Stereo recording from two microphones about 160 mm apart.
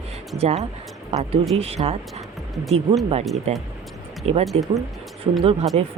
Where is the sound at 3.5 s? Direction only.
40° right (ahead or behind).